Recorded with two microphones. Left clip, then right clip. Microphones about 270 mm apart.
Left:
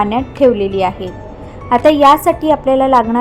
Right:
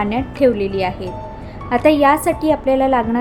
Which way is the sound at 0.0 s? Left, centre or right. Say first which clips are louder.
Left 4 dB; centre.